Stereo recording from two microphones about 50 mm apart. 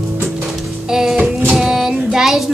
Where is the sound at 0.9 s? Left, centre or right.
Centre.